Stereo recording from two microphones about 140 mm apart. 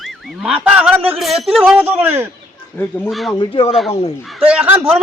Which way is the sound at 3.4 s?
40° left (ahead or behind).